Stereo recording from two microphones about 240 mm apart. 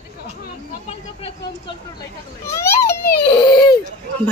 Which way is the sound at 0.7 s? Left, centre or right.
Left.